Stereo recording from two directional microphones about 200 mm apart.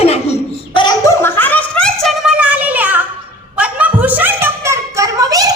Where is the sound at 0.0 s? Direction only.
30° left (ahead or behind).